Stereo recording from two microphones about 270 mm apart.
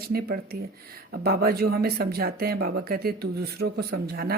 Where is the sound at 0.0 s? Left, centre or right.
Right.